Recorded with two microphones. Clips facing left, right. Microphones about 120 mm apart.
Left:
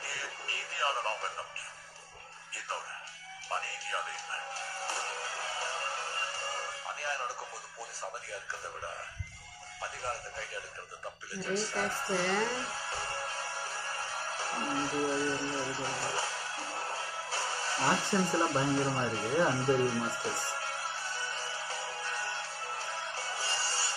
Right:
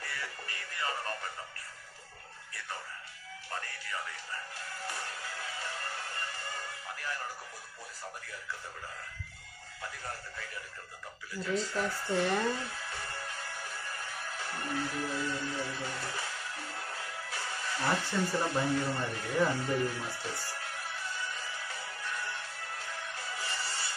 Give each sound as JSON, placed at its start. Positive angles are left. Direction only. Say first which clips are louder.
{"t": 0.0, "sound": "music", "louder": "right 1 dB", "side_deg": 30}
{"t": 4.6, "sound": "music", "louder": "left 3 dB", "side_deg": 30}
{"t": 9.8, "sound": "music", "louder": "left 4 dB", "side_deg": 30}
{"t": 11.3, "sound": "speech", "louder": "right 1 dB", "side_deg": 30}
{"t": 12.3, "sound": "music", "louder": "right 1 dB", "side_deg": 30}